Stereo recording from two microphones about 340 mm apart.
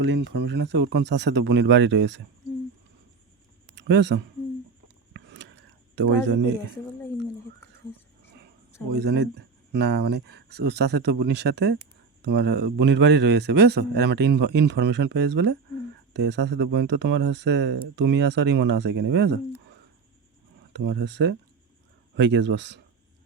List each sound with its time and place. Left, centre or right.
0.0 s speech: right
3.8 s speech: right
5.1 s a sound: right
8.9 s a man's voice: right
20.7 s a man's voice: right